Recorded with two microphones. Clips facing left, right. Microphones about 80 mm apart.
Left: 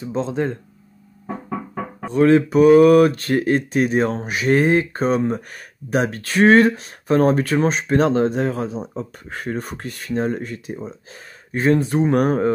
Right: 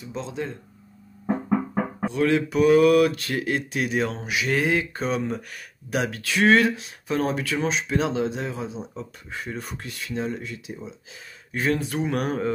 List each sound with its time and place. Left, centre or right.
0.0 s speech: left
2.0 s speech: left